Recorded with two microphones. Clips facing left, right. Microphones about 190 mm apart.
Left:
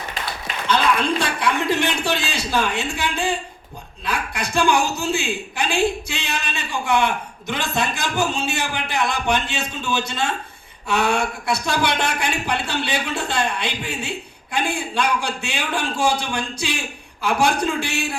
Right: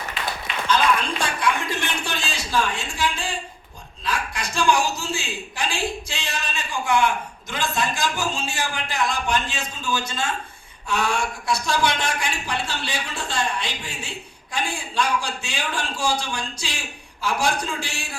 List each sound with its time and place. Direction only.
0.7 s a man's voice: 60° left (ahead or behind)